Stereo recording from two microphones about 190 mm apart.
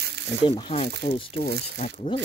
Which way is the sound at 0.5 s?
30° left (ahead or behind).